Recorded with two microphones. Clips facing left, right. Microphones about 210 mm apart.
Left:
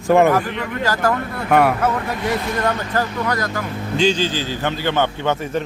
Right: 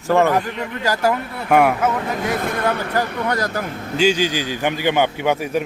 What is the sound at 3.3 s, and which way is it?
Speech, 35° right (ahead or behind).